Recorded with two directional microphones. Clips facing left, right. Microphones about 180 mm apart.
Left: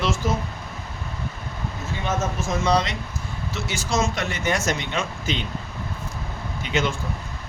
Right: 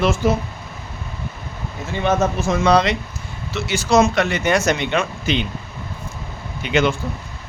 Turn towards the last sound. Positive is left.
turn(degrees=-65)  # may be behind; listen again after turning